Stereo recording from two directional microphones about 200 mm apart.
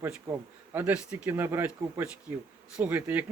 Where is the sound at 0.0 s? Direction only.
10° right (ahead or behind).